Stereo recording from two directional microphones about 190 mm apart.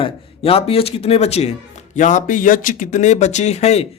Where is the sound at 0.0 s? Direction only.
30° left (ahead or behind).